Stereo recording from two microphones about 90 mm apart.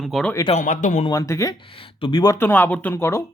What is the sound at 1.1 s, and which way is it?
Speech, 35° left (ahead or behind).